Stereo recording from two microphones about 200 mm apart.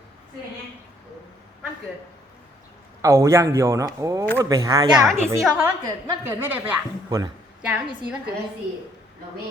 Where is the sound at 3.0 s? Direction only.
15° right (ahead or behind).